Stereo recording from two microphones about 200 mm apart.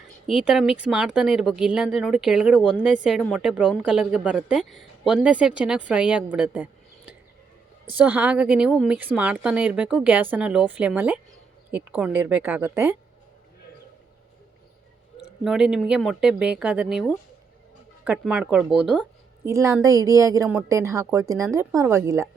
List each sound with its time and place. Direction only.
0.4 s a woman's voice: centre (ahead or behind)
6.3 s a sound: 5° right (ahead or behind)
7.9 s speech: 10° right (ahead or behind)
15.4 s a woman's voice: 5° right (ahead or behind)